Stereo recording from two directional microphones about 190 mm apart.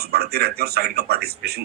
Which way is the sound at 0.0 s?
55° right (ahead or behind).